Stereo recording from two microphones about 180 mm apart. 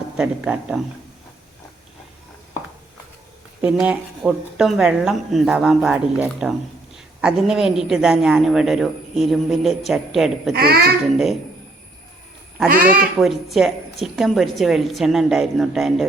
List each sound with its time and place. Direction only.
0.2 s a man's voice: 5° right (ahead or behind)
3.6 s a man's voice: 5° right (ahead or behind)
10.5 s a child's voice: 60° right (ahead or behind)
12.8 s a man's voice: 5° right (ahead or behind)